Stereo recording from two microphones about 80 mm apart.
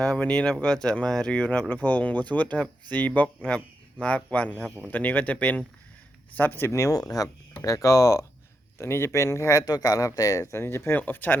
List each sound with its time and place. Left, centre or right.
0.0 s speech: centre; by 9.7 s left
9.7 s speech: left
10.4 s speech: left